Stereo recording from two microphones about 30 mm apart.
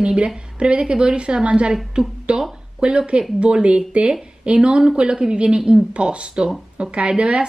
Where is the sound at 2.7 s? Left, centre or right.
Right.